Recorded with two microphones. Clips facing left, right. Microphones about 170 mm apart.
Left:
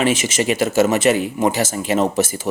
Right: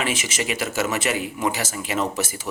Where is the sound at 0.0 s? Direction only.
25° left (ahead or behind).